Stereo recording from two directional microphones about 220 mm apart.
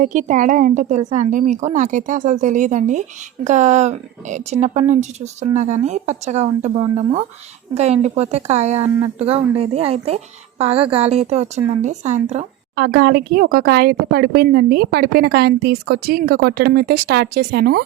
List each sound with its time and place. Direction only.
0.0 s a woman's voice: 35° right (ahead or behind)
12.7 s speech: 45° right (ahead or behind)